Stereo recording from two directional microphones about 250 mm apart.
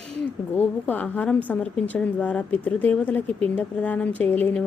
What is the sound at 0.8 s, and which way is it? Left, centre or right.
A woman's voice, centre.